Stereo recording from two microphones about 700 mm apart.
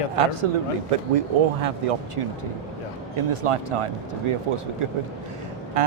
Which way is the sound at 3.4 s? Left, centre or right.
Right.